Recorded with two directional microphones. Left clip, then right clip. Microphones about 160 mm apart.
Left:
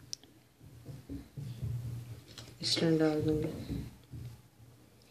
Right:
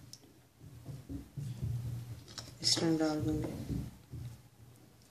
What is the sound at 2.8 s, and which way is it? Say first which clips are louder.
Speech: left 3 dB; 40° left (ahead or behind).